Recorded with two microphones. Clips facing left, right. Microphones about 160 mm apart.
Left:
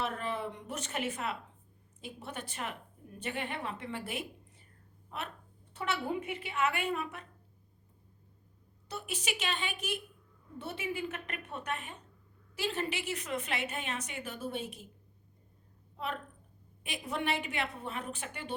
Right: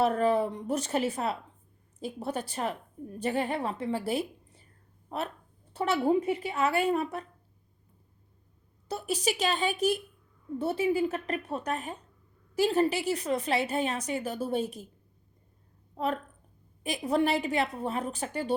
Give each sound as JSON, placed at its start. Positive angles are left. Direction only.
{"t": 0.0, "sound": "a woman's voice", "side_deg": -40}
{"t": 8.9, "sound": "a woman's voice", "side_deg": -35}
{"t": 16.0, "sound": "a woman's voice", "side_deg": -40}